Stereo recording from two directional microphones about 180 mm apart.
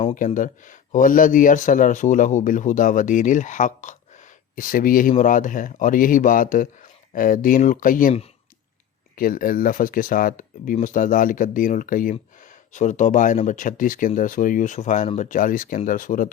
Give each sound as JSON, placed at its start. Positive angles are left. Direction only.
{"t": 0.0, "sound": "speech", "side_deg": 40}
{"t": 9.1, "sound": "speech", "side_deg": 50}